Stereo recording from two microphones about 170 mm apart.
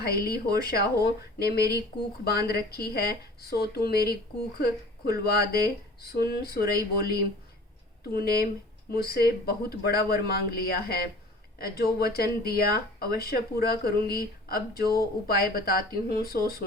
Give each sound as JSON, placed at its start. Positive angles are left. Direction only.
{"t": 0.0, "sound": "speech", "side_deg": 65}